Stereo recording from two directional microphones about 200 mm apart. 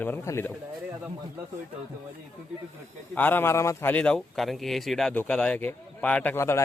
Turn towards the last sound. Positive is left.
turn(degrees=10)  # may be behind; listen again after turning